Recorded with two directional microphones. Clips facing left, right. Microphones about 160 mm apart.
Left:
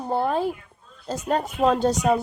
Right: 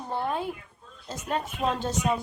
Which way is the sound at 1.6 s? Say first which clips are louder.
Left 10 dB; 40° left (ahead or behind).